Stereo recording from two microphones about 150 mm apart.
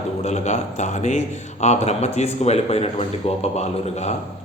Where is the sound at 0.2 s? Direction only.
50° left (ahead or behind).